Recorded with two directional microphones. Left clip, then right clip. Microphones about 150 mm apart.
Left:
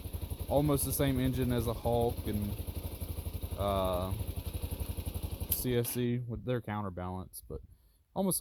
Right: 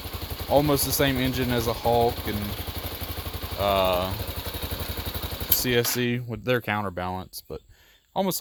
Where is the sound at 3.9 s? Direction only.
45° right (ahead or behind).